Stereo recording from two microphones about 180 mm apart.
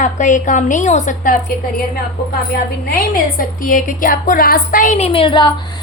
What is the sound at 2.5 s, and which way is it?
A woman's voice, 55° left (ahead or behind).